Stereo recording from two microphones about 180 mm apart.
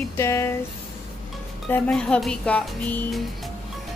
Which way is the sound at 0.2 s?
15° left (ahead or behind).